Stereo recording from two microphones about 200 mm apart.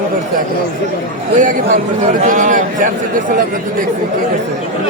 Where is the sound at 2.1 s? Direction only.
40° right (ahead or behind).